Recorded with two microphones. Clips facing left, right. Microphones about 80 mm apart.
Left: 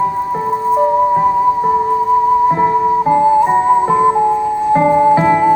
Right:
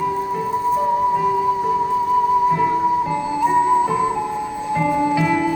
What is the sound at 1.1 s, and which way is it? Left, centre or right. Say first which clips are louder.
Music: left 6 dB; left.